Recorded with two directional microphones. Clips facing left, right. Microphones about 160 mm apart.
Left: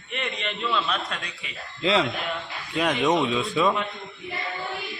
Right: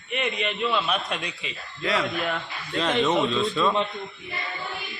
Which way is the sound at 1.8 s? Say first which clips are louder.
Left 4 dB; 25° left (ahead or behind).